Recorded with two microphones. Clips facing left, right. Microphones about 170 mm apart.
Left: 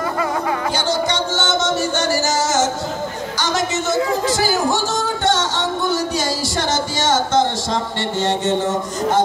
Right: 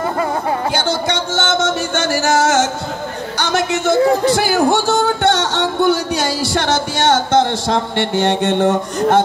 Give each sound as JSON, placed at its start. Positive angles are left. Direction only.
{"t": 0.7, "sound": "music", "side_deg": -60}
{"t": 3.3, "sound": "a man's voice", "side_deg": -60}
{"t": 4.2, "sound": "music", "side_deg": -60}